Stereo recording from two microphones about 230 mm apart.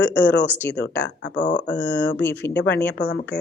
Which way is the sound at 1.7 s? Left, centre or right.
Left.